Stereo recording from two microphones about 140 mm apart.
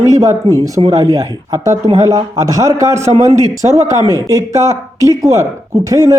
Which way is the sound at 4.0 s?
25° left (ahead or behind).